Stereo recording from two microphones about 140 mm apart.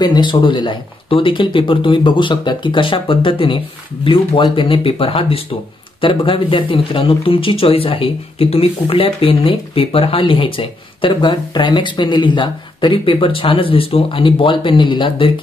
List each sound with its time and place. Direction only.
0.0 s speech: 30° left (ahead or behind)